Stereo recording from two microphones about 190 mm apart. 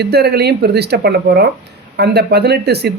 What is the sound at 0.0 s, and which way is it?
Speech, 60° right (ahead or behind).